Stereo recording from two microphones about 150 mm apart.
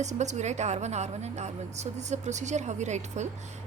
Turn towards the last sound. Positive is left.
turn(degrees=-50)  # may be behind; listen again after turning